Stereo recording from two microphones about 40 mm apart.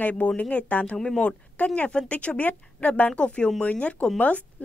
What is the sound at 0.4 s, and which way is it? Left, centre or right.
Speech, left.